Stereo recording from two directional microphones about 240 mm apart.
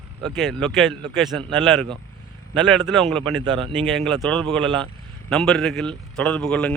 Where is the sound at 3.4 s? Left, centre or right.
Centre.